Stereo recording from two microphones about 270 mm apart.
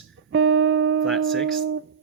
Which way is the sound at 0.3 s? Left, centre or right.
Right.